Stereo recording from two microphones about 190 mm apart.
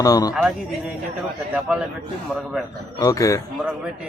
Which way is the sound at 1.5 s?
5° right (ahead or behind).